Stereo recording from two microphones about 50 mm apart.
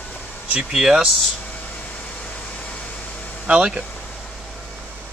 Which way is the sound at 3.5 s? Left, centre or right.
Centre.